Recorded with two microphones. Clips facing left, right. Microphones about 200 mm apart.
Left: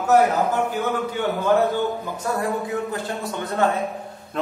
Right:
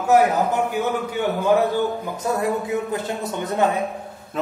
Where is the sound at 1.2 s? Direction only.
10° right (ahead or behind).